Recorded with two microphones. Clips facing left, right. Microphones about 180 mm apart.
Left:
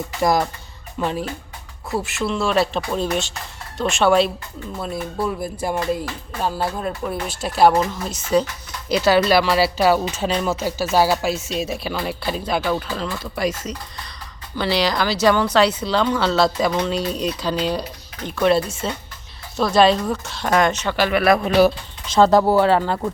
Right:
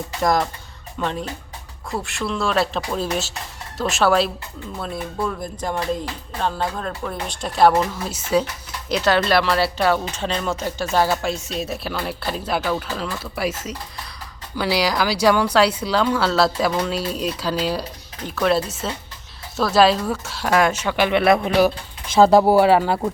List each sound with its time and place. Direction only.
0.2 s speech: 5° left (ahead or behind)
21.1 s speech: 25° right (ahead or behind)